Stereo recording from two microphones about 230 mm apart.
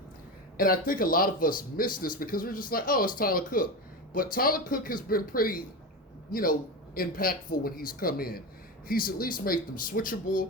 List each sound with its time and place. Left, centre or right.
0.5 s a man's voice: left